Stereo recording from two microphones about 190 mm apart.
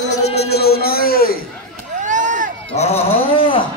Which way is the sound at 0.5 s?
55° left (ahead or behind).